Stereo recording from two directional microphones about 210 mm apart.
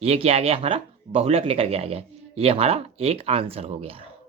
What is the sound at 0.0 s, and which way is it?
Speech, 30° right (ahead or behind).